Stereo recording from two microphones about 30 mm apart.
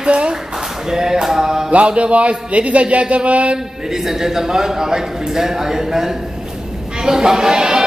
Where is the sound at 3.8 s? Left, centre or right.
Centre.